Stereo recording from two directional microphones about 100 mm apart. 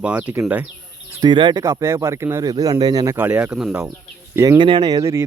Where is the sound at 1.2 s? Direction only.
50° right (ahead or behind).